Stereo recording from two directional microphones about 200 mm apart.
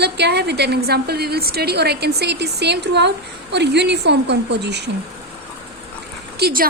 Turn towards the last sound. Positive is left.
turn(degrees=-50)  # may be behind; listen again after turning